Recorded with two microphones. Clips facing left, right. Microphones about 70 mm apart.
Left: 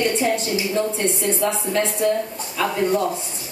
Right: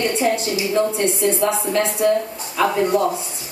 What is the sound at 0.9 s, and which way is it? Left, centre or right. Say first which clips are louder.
Speech: right 3 dB; centre.